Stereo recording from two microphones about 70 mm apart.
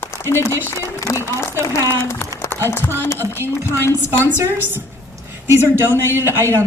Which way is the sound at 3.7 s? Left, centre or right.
Left.